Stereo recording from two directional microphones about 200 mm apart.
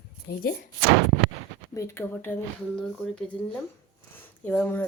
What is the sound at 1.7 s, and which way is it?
Speech, 15° left (ahead or behind).